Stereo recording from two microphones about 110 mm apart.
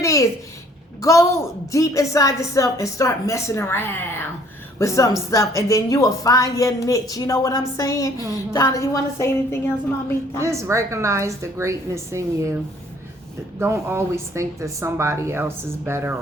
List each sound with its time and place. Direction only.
0.0 s a sound: 30° left (ahead or behind)
1.7 s a woman's voice: 30° left (ahead or behind)
10.4 s a woman's voice: 25° right (ahead or behind)
13.6 s a woman's voice: 20° right (ahead or behind)